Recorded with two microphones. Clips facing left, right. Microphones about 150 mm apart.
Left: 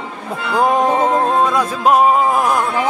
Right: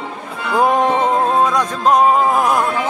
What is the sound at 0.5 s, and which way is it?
Music, centre (ahead or behind).